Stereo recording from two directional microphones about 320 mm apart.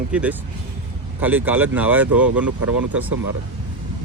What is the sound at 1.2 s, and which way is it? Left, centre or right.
Speech, centre.